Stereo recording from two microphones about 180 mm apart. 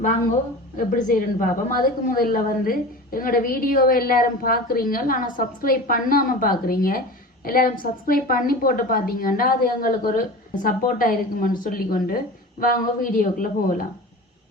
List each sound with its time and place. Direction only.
0.8 s a woman's voice: 45° left (ahead or behind)